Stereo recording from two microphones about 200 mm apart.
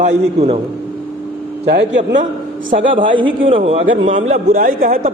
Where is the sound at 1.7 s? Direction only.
60° right (ahead or behind).